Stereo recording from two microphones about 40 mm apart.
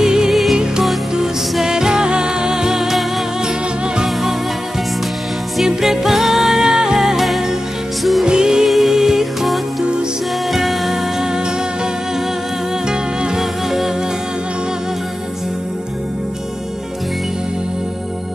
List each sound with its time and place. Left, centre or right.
0.0 s music: centre
0.3 s music: centre
5.6 s music: centre
8.3 s music: centre
8.6 s music: centre
12.9 s music: centre
13.4 s music: centre